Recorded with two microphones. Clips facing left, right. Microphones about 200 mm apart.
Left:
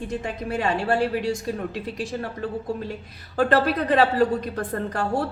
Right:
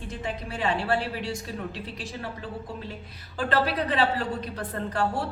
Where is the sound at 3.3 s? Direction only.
45° left (ahead or behind).